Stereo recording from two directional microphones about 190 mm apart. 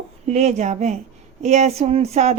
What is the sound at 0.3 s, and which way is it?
Speech, 35° right (ahead or behind).